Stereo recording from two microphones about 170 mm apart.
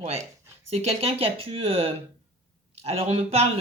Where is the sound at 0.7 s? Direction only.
40° right (ahead or behind).